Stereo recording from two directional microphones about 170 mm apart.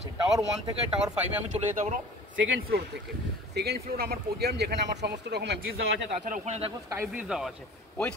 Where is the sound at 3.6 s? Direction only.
85° right.